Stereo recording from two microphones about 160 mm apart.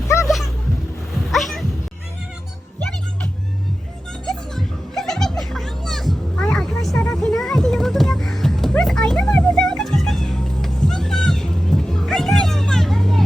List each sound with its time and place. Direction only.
0.1 s a sound: 15° left (ahead or behind)
1.3 s cat: centre (ahead or behind)
4.3 s music: centre (ahead or behind)